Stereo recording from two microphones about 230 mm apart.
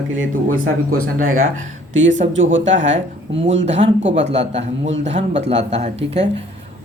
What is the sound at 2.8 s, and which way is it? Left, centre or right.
Speech, right.